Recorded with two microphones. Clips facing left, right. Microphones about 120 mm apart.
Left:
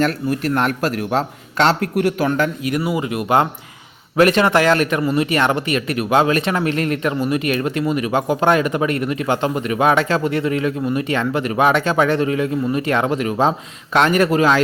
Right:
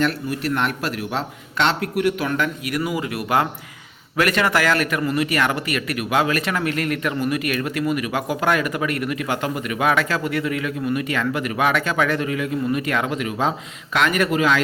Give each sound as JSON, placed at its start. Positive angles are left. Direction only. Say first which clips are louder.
{"t": 0.0, "sound": "speech", "louder": "left 3 dB", "side_deg": 45}